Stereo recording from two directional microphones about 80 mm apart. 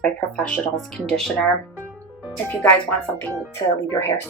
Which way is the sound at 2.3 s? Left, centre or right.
Centre.